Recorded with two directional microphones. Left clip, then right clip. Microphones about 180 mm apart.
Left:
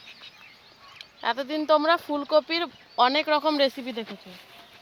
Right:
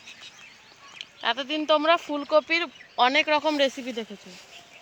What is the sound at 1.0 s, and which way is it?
Speech, 30° left (ahead or behind).